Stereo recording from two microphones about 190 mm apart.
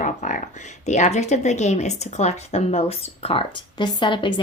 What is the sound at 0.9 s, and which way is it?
Speech, 35° left (ahead or behind).